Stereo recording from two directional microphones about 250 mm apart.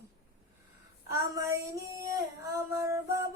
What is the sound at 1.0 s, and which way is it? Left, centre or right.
Female singing, centre.